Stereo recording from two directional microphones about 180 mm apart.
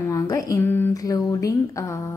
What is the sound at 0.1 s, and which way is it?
A woman's voice, 15° left (ahead or behind).